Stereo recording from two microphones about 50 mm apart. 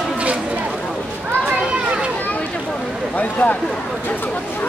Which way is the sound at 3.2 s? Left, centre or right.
Left.